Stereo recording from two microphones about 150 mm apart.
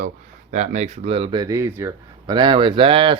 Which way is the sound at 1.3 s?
25° right (ahead or behind).